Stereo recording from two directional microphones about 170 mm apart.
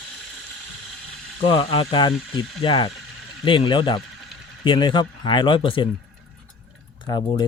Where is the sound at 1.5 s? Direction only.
35° left (ahead or behind).